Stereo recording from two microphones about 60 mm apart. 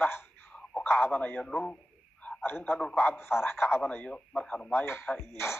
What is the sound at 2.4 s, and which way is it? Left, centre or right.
A man's voice, left.